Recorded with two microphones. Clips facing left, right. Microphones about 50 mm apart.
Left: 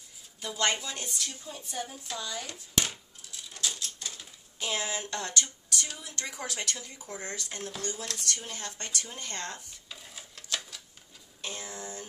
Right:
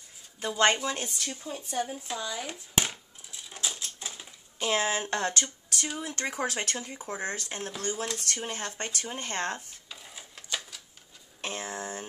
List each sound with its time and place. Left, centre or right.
0.4 s speech: right; by 2.6 s centre
2.7 s a sound: centre
4.6 s speech: right
7.3 s speech: right
7.8 s speech: right
8.2 s speech: right
9.8 s a sound: centre
11.4 s speech: right